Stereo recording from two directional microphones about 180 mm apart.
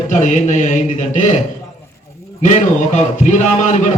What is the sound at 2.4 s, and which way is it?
A man's voice, 40° left (ahead or behind).